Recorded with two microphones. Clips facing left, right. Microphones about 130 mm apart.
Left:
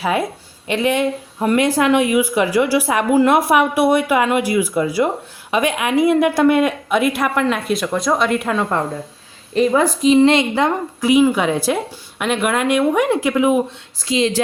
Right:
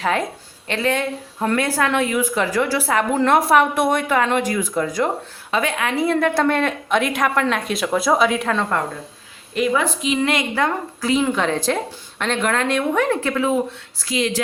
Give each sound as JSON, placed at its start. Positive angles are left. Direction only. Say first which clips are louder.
{"t": 0.0, "sound": "speech", "louder": "left 2 dB", "side_deg": 10}
{"t": 9.6, "sound": "a woman's voice", "louder": "left 5 dB", "side_deg": 35}